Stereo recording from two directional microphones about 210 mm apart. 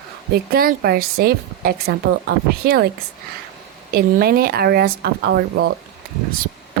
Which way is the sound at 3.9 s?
45° right (ahead or behind).